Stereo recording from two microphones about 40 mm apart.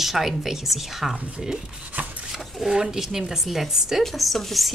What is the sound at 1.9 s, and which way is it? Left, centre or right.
Chopping, right.